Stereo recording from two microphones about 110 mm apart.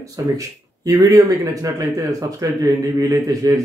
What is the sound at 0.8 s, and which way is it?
A man's voice, 30° right (ahead or behind).